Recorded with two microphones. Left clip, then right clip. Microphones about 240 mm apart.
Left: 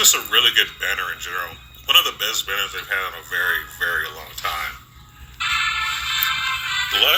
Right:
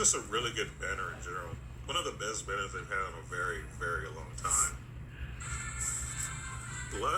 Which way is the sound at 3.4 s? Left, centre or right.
Left.